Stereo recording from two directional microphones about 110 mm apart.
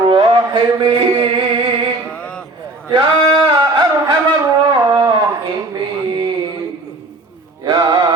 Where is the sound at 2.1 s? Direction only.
10° left (ahead or behind).